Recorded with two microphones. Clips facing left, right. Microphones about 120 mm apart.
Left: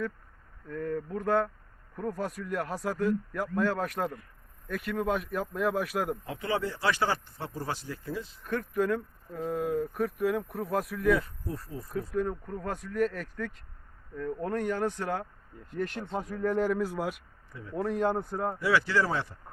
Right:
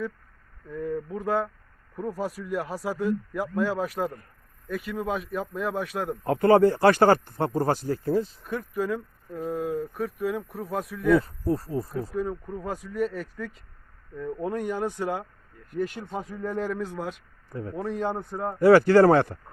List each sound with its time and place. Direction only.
0.7 s speech: 5° right (ahead or behind)
6.2 s speech: 50° right (ahead or behind)
8.4 s speech: 5° right (ahead or behind)
11.2 s speech: 35° right (ahead or behind)
12.1 s speech: 5° right (ahead or behind)
15.5 s speech: 25° left (ahead or behind)
15.8 s speech: 5° right (ahead or behind)
17.5 s a man's voice: 45° right (ahead or behind)
17.7 s speech: centre (ahead or behind)
18.6 s speech: 50° right (ahead or behind)